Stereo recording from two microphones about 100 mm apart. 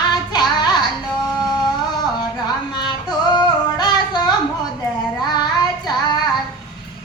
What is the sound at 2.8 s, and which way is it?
Singing, 45° left (ahead or behind).